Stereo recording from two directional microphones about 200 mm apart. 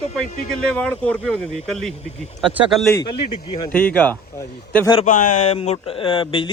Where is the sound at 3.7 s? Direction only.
5° left (ahead or behind).